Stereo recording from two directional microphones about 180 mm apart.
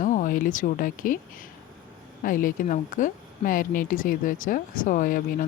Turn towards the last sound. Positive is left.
turn(degrees=50)  # may be behind; listen again after turning